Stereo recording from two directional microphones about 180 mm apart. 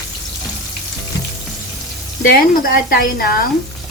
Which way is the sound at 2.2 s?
55° left (ahead or behind).